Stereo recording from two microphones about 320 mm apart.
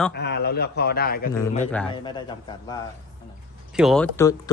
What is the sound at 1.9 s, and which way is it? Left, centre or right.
Speech, centre.